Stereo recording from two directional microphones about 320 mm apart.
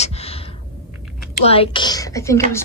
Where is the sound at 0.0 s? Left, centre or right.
Centre.